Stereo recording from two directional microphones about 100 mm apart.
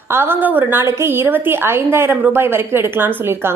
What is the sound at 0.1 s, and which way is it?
A woman's voice, 25° right (ahead or behind).